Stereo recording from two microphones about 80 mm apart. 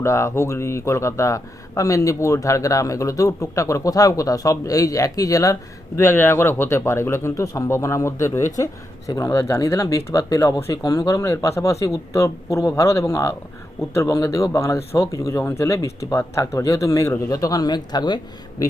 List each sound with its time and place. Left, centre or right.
0.0 s speech: left
6.0 s speech: left